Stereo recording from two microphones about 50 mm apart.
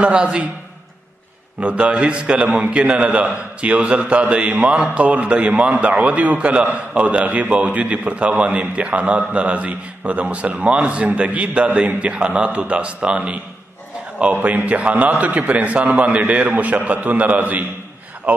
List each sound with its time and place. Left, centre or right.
0.0 s a man's voice: right
1.6 s a man's voice: right